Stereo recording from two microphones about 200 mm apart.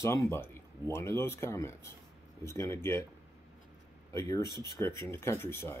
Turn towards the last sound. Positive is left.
turn(degrees=10)  # may be behind; listen again after turning